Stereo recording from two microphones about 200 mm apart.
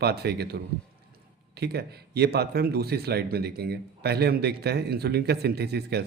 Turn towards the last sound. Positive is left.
turn(degrees=-55)  # may be behind; listen again after turning